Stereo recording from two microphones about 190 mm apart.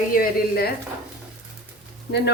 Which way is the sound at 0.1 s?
50° left (ahead or behind).